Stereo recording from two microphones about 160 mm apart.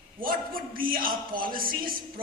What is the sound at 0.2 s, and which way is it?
A man's voice, 65° right (ahead or behind).